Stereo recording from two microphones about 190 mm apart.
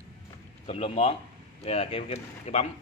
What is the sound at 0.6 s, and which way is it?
Speech, 30° left (ahead or behind).